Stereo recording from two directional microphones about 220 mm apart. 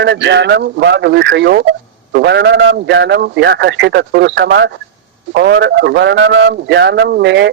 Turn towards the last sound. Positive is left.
turn(degrees=-50)  # may be behind; listen again after turning